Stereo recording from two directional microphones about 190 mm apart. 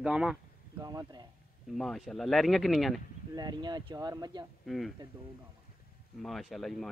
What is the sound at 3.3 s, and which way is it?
Speech, 20° right (ahead or behind).